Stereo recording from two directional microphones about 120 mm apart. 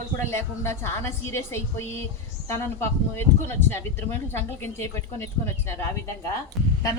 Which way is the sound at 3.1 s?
20° left (ahead or behind).